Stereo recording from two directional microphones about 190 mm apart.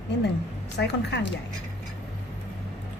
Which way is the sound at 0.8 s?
65° left (ahead or behind).